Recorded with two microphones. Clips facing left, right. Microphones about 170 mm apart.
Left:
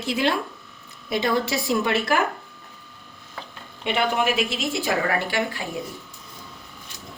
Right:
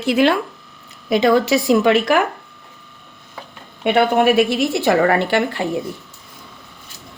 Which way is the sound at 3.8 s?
60° right (ahead or behind).